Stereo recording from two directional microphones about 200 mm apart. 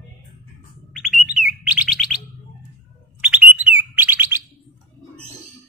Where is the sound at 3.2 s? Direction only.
5° right (ahead or behind).